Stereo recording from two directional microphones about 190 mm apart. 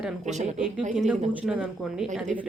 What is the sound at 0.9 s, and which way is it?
A woman's voice, 5° right (ahead or behind).